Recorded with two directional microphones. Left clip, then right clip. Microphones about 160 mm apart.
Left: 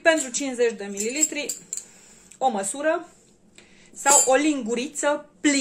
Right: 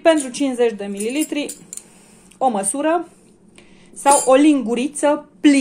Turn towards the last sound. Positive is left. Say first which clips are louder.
# right 7 dB
turn(degrees=-30)  # may be behind; listen again after turning